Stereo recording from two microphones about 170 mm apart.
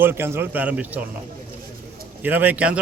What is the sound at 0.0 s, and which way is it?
A man's voice, 15° right (ahead or behind).